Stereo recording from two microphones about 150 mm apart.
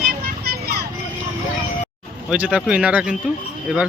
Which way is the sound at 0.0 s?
90° right.